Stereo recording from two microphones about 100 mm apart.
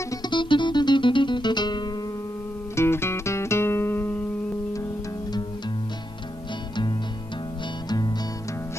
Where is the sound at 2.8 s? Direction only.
25° left (ahead or behind).